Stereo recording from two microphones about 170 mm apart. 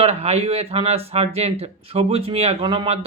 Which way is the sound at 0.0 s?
35° right (ahead or behind).